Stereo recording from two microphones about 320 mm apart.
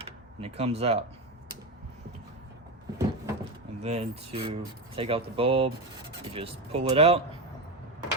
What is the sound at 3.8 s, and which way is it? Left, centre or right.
Speech, centre.